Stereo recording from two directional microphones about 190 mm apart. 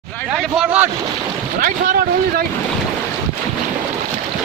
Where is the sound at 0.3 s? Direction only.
Centre (ahead or behind).